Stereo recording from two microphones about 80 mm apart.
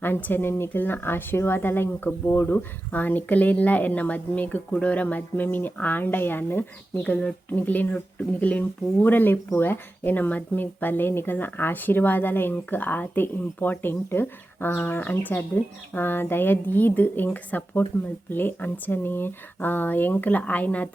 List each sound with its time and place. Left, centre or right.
0.0 s speech: left
7.0 s speech: centre